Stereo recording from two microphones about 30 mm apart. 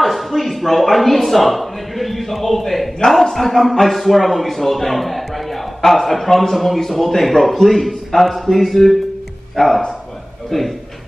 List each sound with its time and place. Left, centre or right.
0.0 s a man's voice: centre
9.6 s speech: left
10.5 s a man's voice: centre